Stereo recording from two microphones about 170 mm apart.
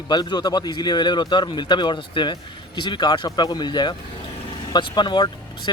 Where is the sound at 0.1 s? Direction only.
25° left (ahead or behind).